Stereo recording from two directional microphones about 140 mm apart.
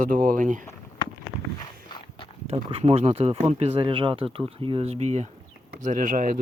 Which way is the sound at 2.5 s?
45° right (ahead or behind).